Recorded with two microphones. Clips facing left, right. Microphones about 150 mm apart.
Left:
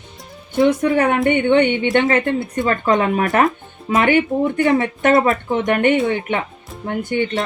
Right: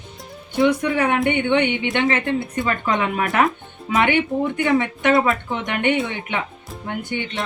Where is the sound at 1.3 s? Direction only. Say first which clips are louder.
Left 4 dB; 45° left (ahead or behind).